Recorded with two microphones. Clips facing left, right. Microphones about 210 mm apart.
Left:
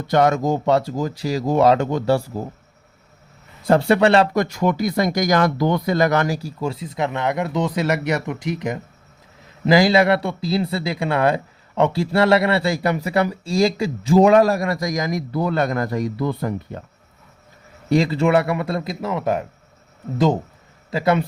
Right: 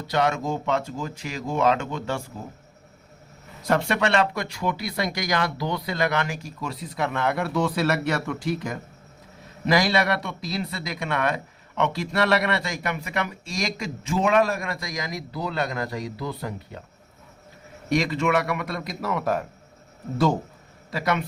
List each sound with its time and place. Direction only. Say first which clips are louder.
0.1 s speech: left 7 dB; 40° left (ahead or behind)
3.7 s speech: left 8 dB; 35° left (ahead or behind); by 16.8 s 50° left (ahead or behind)
17.8 s a man's voice: left 5 dB; 30° left (ahead or behind)